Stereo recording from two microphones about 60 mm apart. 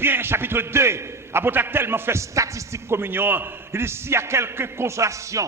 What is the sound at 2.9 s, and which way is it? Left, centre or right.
A man's voice, right.